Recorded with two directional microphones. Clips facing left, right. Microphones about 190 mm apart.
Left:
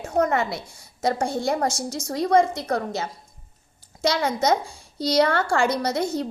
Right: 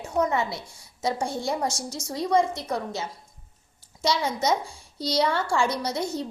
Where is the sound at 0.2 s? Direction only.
65° left (ahead or behind).